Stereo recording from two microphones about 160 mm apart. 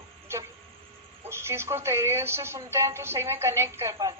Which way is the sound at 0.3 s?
15° right (ahead or behind).